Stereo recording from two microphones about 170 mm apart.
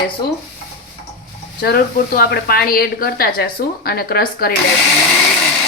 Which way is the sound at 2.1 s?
65° left (ahead or behind).